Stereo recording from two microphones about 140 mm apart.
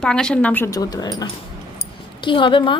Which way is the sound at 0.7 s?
25° left (ahead or behind).